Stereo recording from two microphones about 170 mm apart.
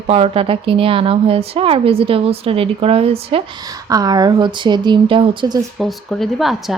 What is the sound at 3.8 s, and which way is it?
A woman's voice, 20° right (ahead or behind).